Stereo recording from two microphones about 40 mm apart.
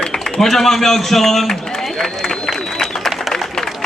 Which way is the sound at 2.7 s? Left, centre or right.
Centre.